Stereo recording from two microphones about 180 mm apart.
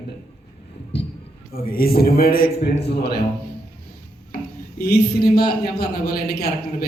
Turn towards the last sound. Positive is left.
turn(degrees=60)  # may be behind; listen again after turning